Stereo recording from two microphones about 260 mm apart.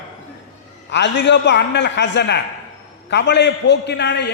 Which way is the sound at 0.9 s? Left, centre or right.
Left.